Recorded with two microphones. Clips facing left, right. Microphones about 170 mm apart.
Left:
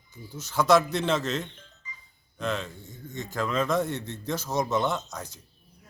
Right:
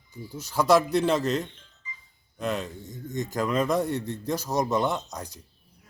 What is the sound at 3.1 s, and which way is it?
Speech, 15° right (ahead or behind).